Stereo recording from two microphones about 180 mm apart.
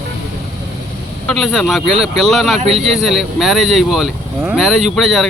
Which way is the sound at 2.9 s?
Centre (ahead or behind).